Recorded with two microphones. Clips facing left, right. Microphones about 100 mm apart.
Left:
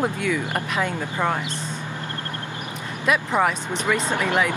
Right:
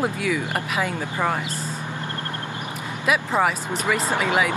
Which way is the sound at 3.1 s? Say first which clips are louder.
Even; 5° right (ahead or behind).